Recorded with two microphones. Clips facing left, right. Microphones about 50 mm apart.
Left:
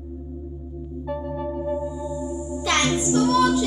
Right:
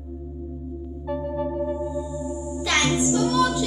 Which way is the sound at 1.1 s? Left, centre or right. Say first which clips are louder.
Right 2 dB; centre.